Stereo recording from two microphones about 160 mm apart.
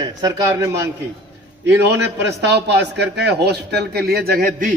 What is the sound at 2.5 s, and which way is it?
A man's voice, 90° right.